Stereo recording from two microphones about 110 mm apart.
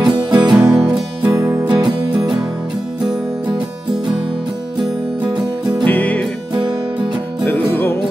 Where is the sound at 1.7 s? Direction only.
40° right (ahead or behind).